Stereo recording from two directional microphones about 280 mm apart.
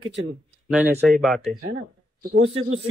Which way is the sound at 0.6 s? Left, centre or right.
Centre.